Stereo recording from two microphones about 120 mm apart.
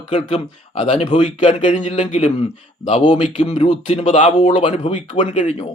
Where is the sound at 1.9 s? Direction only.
60° left (ahead or behind).